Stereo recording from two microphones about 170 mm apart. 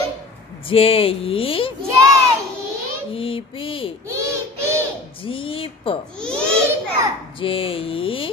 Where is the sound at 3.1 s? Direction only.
30° left (ahead or behind).